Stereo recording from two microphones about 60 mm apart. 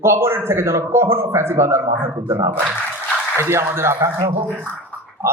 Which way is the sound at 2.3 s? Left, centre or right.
Right.